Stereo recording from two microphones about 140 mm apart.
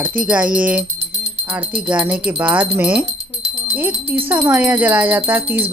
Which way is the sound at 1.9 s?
10° right (ahead or behind).